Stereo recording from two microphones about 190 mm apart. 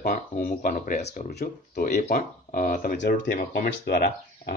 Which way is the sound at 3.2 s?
55° left (ahead or behind).